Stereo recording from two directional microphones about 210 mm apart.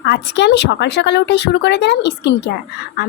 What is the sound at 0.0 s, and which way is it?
A woman's voice, 55° left (ahead or behind).